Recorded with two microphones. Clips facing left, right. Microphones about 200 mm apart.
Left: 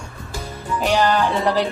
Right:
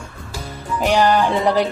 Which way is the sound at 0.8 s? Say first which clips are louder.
Right 2 dB; 15° right (ahead or behind).